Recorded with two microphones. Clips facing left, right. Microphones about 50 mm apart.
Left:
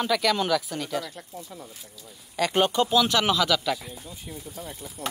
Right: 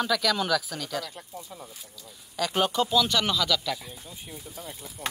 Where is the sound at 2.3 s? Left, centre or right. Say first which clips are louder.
Left 3 dB; centre.